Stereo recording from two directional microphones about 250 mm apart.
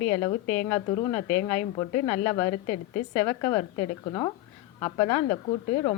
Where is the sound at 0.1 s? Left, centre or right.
Centre.